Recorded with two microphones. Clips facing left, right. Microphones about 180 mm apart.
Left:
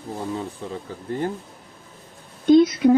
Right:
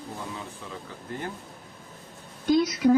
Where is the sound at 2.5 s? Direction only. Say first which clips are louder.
Left 6 dB; 25° left (ahead or behind).